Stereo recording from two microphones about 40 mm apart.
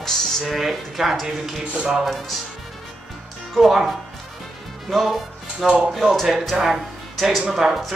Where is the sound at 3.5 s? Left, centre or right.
Centre.